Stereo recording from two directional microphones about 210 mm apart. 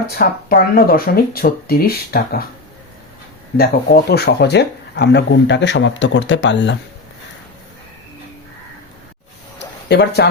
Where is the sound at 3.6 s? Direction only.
50° left (ahead or behind).